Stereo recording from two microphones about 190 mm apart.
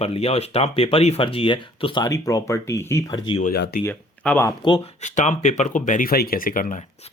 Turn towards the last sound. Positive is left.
turn(degrees=45)  # may be behind; listen again after turning